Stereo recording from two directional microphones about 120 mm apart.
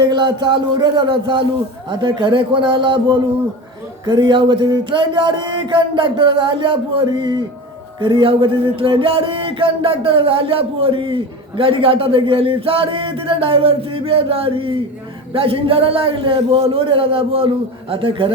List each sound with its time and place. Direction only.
0.0 s speech: 35° right (ahead or behind)